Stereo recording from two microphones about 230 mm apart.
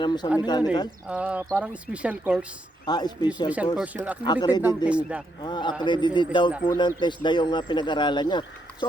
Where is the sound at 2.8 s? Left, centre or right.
Centre.